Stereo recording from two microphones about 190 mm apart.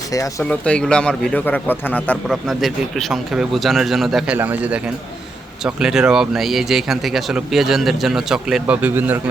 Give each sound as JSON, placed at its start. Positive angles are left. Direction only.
{"t": 0.1, "sound": "a man's voice", "side_deg": 15}
{"t": 0.4, "sound": "a man's voice", "side_deg": 5}